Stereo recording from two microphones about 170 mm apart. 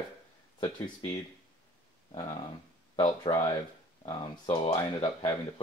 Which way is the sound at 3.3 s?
30° left (ahead or behind).